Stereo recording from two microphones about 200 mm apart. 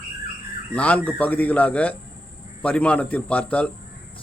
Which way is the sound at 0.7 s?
5° left (ahead or behind).